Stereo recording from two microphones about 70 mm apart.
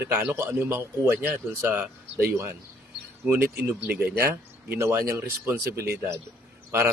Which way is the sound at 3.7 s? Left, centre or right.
Right.